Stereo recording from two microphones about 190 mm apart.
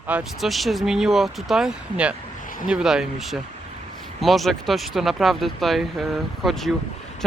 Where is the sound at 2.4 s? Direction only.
45° left (ahead or behind).